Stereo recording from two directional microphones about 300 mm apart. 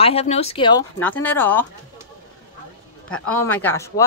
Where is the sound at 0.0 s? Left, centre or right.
Left.